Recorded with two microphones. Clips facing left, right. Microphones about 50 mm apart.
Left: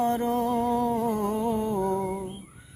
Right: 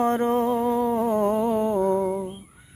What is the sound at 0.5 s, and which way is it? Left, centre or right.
Humming, right.